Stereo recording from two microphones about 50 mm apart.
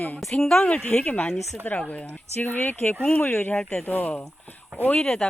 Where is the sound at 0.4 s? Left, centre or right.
Centre; by 2.9 s left.